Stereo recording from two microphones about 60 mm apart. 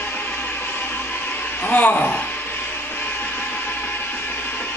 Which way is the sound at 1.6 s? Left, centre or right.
Left.